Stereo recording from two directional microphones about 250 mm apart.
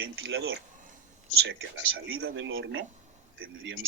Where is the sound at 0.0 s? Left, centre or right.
Right.